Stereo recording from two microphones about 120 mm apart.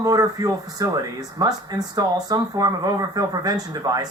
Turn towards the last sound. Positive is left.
turn(degrees=-30)  # may be behind; listen again after turning